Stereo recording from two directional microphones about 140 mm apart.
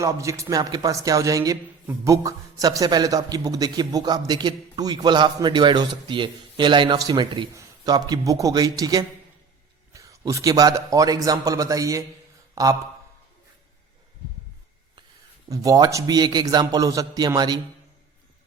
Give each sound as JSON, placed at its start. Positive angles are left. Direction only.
{"t": 0.0, "sound": "a man's voice", "side_deg": -20}
{"t": 15.4, "sound": "a man's voice", "side_deg": -25}